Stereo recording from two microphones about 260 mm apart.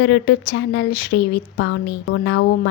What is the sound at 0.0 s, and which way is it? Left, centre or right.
A woman's voice, left.